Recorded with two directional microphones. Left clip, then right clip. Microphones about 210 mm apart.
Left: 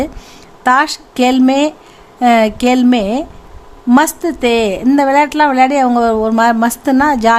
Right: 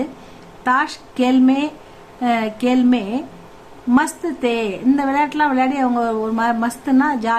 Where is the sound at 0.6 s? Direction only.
45° left (ahead or behind).